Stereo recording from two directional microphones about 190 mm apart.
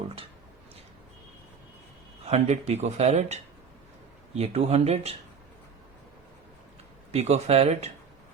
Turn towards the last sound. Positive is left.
turn(degrees=-35)  # may be behind; listen again after turning